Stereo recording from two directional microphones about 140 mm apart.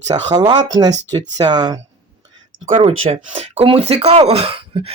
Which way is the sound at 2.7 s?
40° right (ahead or behind).